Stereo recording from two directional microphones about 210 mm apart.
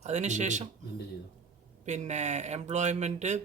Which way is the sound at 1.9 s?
35° right (ahead or behind).